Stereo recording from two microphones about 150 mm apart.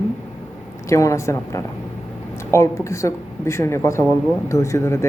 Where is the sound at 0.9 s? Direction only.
20° left (ahead or behind).